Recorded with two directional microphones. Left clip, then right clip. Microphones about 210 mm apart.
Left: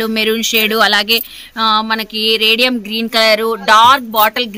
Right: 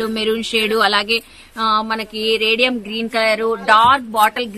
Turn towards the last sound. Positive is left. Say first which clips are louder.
# left 2 dB
turn(degrees=45)  # may be behind; listen again after turning